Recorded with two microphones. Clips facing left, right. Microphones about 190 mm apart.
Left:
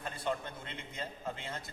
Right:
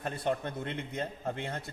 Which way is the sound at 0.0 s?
60° right (ahead or behind).